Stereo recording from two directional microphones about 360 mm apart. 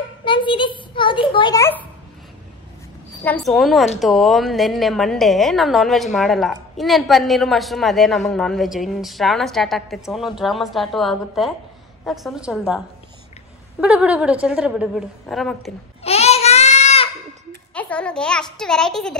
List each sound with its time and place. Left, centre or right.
0.2 s a child's voice: centre
3.3 s a woman's voice: centre
16.0 s a sound: centre
17.7 s a woman's voice: centre